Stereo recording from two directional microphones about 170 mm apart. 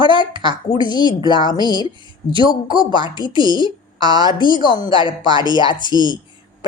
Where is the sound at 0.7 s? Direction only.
25° left (ahead or behind).